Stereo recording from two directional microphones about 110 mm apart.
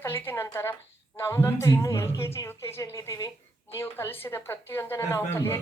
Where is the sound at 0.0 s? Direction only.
20° left (ahead or behind).